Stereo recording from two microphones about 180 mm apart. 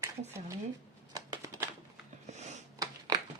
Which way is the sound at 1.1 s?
20° right (ahead or behind).